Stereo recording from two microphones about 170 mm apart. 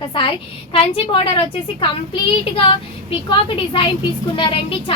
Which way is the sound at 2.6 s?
30° left (ahead or behind).